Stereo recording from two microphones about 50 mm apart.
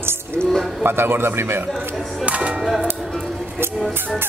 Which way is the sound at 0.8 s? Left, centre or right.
Right.